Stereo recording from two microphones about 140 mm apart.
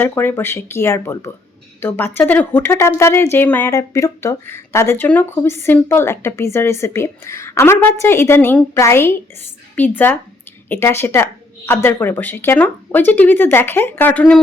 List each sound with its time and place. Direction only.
0.0 s speech: 15° left (ahead or behind)